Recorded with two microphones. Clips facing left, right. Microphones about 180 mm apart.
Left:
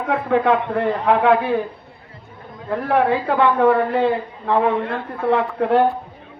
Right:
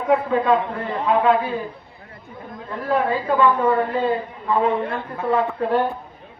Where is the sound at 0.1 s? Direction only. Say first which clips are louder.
Even; 65° left (ahead or behind).